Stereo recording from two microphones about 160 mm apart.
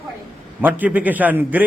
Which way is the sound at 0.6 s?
10° right (ahead or behind).